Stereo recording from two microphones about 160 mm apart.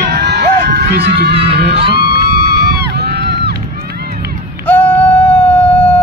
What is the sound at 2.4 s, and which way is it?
Run, 80° right.